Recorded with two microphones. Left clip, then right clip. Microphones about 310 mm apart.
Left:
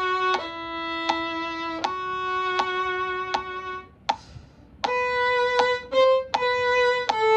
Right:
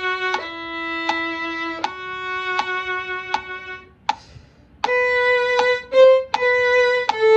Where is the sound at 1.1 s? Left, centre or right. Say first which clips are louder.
Right 3 dB; left.